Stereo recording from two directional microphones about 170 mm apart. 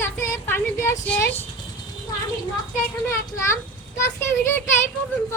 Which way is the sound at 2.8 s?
15° left (ahead or behind).